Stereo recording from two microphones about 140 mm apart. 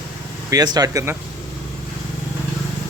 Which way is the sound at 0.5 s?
25° right (ahead or behind).